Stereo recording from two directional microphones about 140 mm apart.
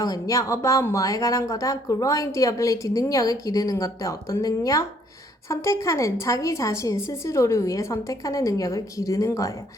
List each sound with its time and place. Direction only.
0.0 s speech: 25° left (ahead or behind)